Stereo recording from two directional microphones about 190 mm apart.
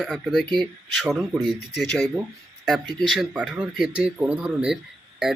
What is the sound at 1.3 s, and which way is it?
Speech, 20° right (ahead or behind).